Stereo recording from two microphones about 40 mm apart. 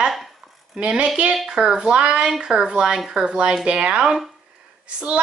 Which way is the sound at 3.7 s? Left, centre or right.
Right.